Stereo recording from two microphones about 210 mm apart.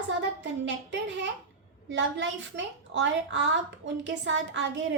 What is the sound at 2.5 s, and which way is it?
A woman's voice, 60° right (ahead or behind).